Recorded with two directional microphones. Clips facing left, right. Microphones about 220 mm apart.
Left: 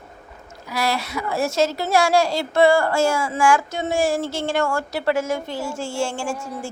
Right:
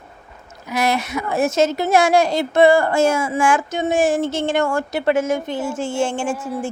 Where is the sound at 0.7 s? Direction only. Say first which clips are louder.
Right 4 dB; 20° right (ahead or behind).